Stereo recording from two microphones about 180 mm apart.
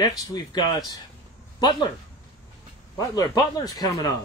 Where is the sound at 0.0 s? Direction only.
20° left (ahead or behind).